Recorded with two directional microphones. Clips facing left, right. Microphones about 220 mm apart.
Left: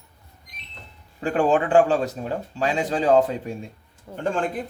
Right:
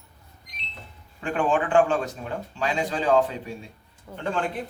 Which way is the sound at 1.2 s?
35° left (ahead or behind).